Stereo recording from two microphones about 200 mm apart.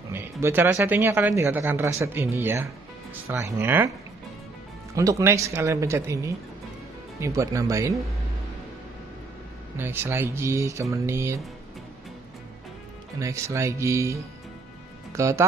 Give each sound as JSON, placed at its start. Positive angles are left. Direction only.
{"t": 0.1, "sound": "speech", "side_deg": -10}
{"t": 4.9, "sound": "speech", "side_deg": -15}
{"t": 9.8, "sound": "speech", "side_deg": -10}
{"t": 13.2, "sound": "speech", "side_deg": -15}
{"t": 15.1, "sound": "speech", "side_deg": -15}